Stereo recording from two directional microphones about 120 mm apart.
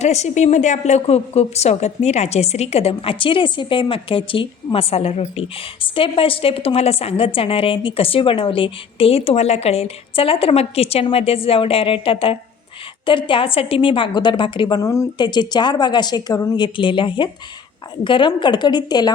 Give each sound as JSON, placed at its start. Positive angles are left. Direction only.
{"t": 0.0, "sound": "a woman's voice", "side_deg": 65}
{"t": 14.8, "sound": "speech", "side_deg": 25}
{"t": 15.2, "sound": "a woman's voice", "side_deg": 40}
{"t": 16.6, "sound": "a woman's voice", "side_deg": 45}